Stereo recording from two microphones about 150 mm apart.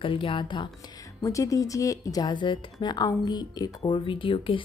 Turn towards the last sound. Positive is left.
turn(degrees=35)  # may be behind; listen again after turning